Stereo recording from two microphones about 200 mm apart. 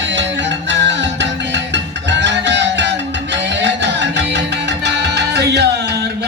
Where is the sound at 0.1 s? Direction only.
65° right (ahead or behind).